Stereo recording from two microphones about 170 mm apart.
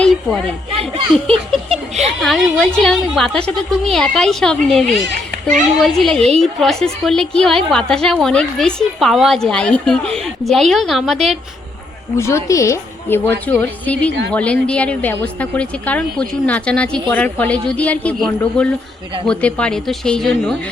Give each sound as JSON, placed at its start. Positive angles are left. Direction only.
{"t": 0.0, "sound": "a sound", "side_deg": 0}
{"t": 0.7, "sound": "a child's voice", "side_deg": -35}
{"t": 2.0, "sound": "a woman's voice", "side_deg": 0}
{"t": 12.1, "sound": "a woman's voice", "side_deg": 15}